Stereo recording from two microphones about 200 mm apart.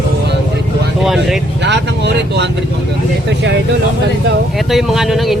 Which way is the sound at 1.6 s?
60° right (ahead or behind).